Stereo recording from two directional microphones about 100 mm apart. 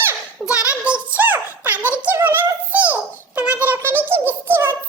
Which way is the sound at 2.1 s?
20° right (ahead or behind).